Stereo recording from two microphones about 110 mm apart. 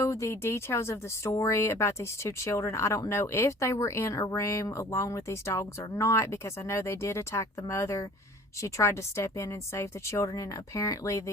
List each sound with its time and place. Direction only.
0.0 s speech: 25° left (ahead or behind)